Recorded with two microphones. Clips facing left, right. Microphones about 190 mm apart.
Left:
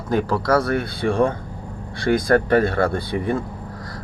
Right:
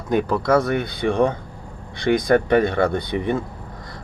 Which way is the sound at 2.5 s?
5° left (ahead or behind).